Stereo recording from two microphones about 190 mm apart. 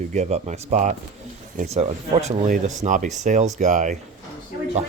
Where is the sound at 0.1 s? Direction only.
35° right (ahead or behind).